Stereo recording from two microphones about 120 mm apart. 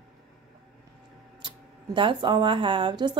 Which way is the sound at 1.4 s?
45° right (ahead or behind).